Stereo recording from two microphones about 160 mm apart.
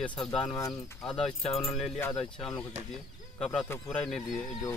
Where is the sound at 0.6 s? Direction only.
20° left (ahead or behind).